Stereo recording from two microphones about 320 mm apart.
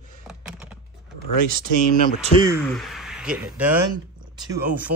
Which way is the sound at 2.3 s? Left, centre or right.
Centre.